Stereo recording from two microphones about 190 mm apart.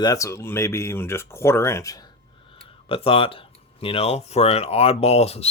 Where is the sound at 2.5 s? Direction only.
30° left (ahead or behind).